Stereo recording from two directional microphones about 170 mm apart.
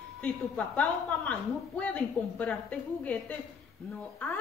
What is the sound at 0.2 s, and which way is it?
A woman's voice, 10° left (ahead or behind).